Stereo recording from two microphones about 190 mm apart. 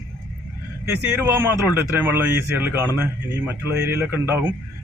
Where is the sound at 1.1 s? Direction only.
10° right (ahead or behind).